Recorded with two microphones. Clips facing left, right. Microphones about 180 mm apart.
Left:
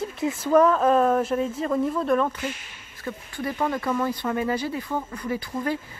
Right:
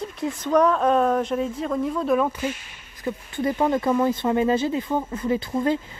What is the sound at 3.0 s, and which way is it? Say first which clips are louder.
Speech: right 5 dB; 20° right (ahead or behind).